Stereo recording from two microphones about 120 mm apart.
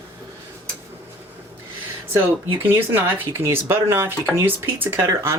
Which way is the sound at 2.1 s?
15° right (ahead or behind).